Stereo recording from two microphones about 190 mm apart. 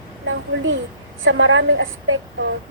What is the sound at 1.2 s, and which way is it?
A woman's voice, 90° right.